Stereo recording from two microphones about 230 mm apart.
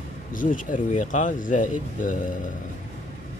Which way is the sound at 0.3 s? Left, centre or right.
Left.